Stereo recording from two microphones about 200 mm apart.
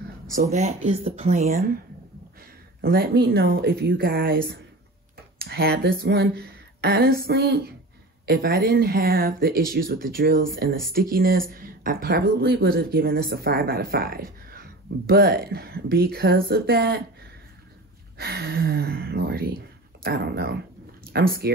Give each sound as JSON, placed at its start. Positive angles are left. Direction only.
{"t": 0.3, "sound": "speech", "side_deg": -40}
{"t": 2.8, "sound": "speech", "side_deg": -50}
{"t": 5.4, "sound": "speech", "side_deg": -50}
{"t": 18.1, "sound": "speech", "side_deg": -50}